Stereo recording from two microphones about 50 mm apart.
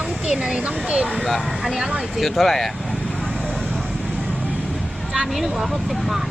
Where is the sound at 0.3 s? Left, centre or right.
Centre.